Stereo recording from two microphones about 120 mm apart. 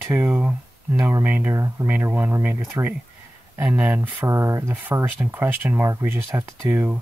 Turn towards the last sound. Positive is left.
turn(degrees=-20)  # may be behind; listen again after turning